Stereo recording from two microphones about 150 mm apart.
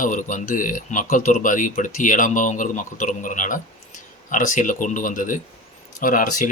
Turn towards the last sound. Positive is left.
turn(degrees=60)  # may be behind; listen again after turning